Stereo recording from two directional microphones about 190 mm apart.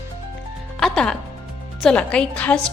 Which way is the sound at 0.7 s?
5° left (ahead or behind).